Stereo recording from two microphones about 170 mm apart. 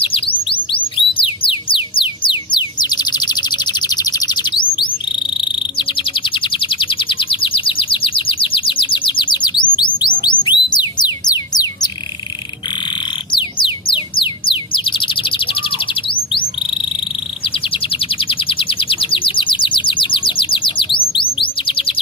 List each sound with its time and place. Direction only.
0.0 s music: 30° left (ahead or behind)
5.1 s a sound: 30° left (ahead or behind)
10.4 s bird: 25° left (ahead or behind)
12.8 s music: 30° left (ahead or behind)